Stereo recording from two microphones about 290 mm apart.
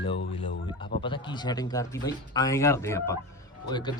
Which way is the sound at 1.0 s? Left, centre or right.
Centre.